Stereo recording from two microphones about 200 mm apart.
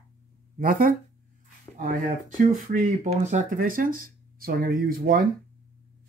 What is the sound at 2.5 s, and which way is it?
Speech, 40° right (ahead or behind).